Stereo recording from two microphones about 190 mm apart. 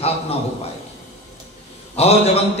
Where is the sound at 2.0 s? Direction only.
35° left (ahead or behind).